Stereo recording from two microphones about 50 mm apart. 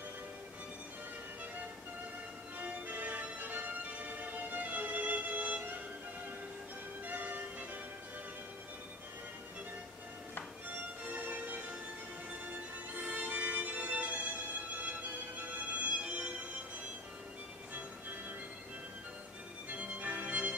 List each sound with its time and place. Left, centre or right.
2.6 s music: right
7.1 s music: right
11.1 s music: right
19.7 s music: right